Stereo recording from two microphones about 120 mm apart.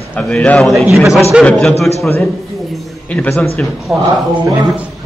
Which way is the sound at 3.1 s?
10° left (ahead or behind).